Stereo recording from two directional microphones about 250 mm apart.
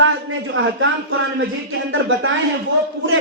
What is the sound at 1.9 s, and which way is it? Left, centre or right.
Speech, right.